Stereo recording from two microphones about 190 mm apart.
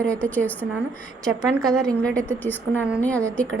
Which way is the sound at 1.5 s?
Centre (ahead or behind).